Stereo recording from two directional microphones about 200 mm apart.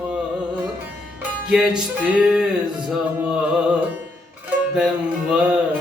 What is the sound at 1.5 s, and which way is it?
Music, 5° right (ahead or behind).